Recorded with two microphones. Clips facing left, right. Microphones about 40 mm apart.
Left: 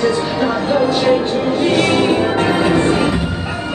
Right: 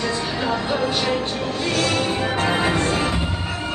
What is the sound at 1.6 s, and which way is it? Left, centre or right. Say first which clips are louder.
Music: left 7 dB; left.